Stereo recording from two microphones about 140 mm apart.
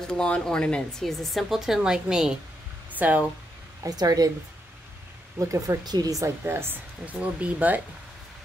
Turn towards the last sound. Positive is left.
turn(degrees=-10)  # may be behind; listen again after turning